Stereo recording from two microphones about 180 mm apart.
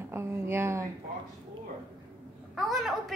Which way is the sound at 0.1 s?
15° right (ahead or behind).